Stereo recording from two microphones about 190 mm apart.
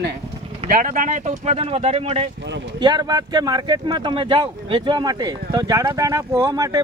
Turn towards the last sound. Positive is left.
turn(degrees=-20)  # may be behind; listen again after turning